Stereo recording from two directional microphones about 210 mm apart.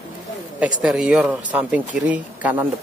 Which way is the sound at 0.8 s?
5° right (ahead or behind).